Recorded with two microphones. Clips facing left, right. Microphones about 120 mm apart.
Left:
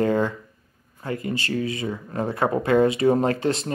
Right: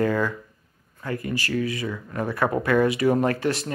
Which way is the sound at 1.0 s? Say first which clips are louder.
Left 1 dB; 25° left (ahead or behind).